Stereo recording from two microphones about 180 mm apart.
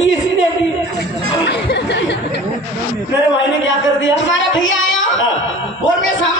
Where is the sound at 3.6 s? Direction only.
90° left.